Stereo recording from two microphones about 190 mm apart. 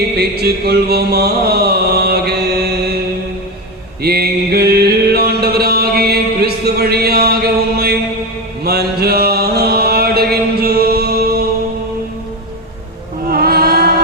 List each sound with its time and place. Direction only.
0.2 s mantra: 55° right (ahead or behind)
4.0 s chant: 55° right (ahead or behind)
6.0 s mantra: 55° right (ahead or behind)
13.3 s music: 55° right (ahead or behind)